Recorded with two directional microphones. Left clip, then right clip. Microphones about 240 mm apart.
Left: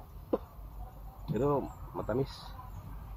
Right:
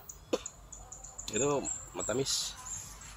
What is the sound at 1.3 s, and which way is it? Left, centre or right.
Speech, right.